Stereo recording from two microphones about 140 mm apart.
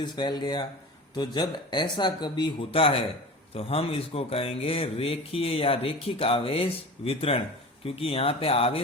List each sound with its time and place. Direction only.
0.0 s speech: 30° left (ahead or behind)